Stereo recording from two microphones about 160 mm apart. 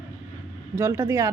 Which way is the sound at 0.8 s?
15° right (ahead or behind).